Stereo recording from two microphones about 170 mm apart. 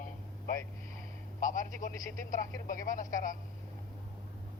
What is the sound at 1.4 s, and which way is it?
Speech, 50° left (ahead or behind).